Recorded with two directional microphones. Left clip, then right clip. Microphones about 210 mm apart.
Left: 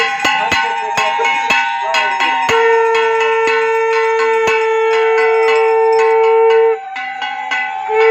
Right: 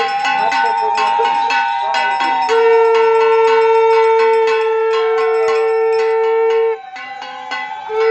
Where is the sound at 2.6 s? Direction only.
5° right (ahead or behind).